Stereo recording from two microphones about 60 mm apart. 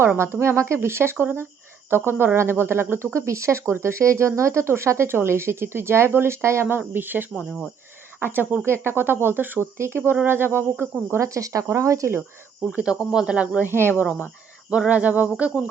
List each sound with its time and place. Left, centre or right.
0.2 s speech: right
1.1 s a sound: right
1.9 s speech: right
6.7 s speech: right
9.7 s speech: right
11.1 s speech: right
12.7 s speech: centre
13.7 s speech: right
13.9 s a sound: right